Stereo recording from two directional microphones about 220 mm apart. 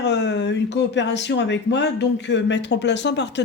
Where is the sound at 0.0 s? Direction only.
50° left (ahead or behind).